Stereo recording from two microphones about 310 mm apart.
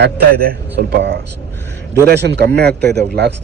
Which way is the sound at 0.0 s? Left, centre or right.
Right.